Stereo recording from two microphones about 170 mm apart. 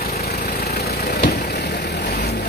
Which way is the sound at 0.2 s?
65° left (ahead or behind).